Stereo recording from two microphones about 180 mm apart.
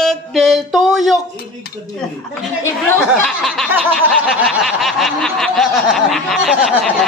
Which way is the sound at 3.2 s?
Centre (ahead or behind).